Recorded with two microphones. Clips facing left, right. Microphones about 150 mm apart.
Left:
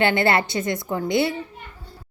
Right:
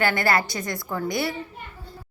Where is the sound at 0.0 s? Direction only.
25° left (ahead or behind).